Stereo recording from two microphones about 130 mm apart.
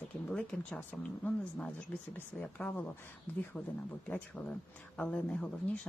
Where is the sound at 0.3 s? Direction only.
10° left (ahead or behind).